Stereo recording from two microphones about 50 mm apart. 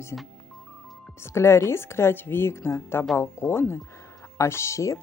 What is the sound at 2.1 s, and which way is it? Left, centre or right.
Speech, left.